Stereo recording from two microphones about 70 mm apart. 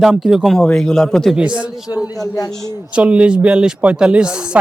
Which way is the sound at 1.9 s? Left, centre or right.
Left.